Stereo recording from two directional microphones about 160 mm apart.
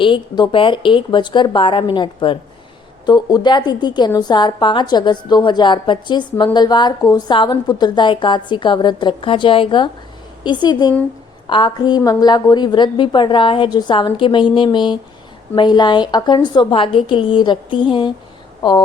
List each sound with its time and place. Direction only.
0.0 s a woman's voice: 30° left (ahead or behind)